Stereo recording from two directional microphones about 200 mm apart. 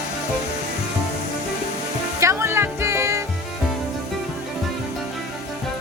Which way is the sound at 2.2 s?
15° right (ahead or behind).